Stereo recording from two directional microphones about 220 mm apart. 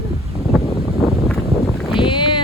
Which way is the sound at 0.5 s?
5° right (ahead or behind).